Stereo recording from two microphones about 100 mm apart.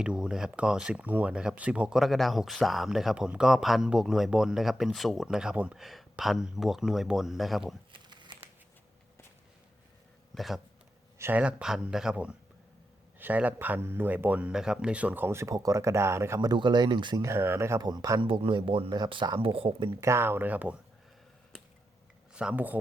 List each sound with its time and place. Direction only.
0.0 s speech: 10° right (ahead or behind)
7.9 s crumpling: 50° right (ahead or behind)
10.3 s speech: centre (ahead or behind)
11.2 s speech: 15° right (ahead or behind)
16.5 s speech: 45° right (ahead or behind)
17.2 s speech: 25° right (ahead or behind)
17.7 s speech: 40° right (ahead or behind)
18.2 s speech: 60° right (ahead or behind)
18.9 s speech: 50° right (ahead or behind)
19.4 s speech: 70° right (ahead or behind)
20.0 s speech: 25° right (ahead or behind)
22.4 s speech: 15° right (ahead or behind)